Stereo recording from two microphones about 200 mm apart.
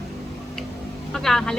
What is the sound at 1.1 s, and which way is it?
Speech, centre (ahead or behind).